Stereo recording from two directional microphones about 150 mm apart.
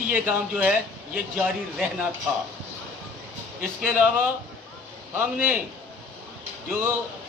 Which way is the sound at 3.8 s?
10° right (ahead or behind).